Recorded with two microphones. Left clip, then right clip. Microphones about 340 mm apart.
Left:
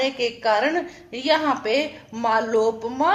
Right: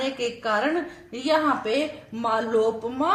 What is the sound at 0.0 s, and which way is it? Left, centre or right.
A woman's voice, centre.